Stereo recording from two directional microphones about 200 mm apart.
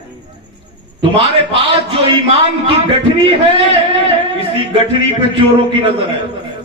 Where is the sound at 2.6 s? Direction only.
25° right (ahead or behind).